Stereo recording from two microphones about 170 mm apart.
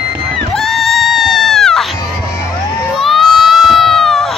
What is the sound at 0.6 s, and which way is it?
Crowd, centre (ahead or behind).